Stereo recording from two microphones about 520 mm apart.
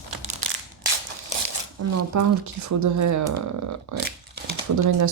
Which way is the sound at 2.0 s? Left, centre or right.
Right.